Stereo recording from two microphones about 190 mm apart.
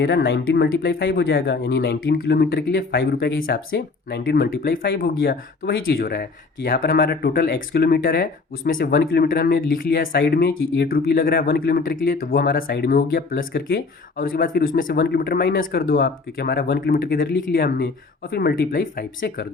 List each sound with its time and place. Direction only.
0.0 s speech: 65° left (ahead or behind)
10.8 s speech: 50° left (ahead or behind)